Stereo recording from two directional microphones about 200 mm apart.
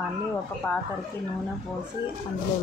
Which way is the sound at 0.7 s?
10° left (ahead or behind).